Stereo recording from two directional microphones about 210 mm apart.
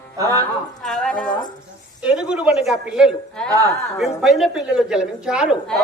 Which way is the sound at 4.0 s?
Centre (ahead or behind).